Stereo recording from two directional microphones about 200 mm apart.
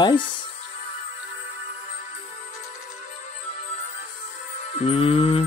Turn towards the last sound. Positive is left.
turn(degrees=30)  # may be behind; listen again after turning